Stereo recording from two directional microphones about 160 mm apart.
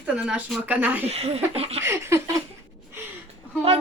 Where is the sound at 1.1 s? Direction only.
40° right (ahead or behind).